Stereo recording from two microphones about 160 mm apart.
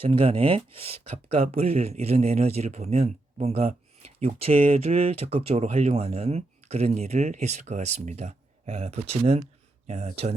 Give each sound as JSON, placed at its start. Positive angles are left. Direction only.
{"t": 0.0, "sound": "speech", "side_deg": -35}